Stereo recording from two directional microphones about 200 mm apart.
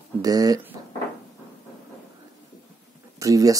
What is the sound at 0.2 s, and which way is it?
Speech, 20° right (ahead or behind).